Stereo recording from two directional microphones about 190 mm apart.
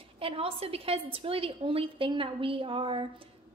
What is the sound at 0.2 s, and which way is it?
A woman's voice, 30° right (ahead or behind).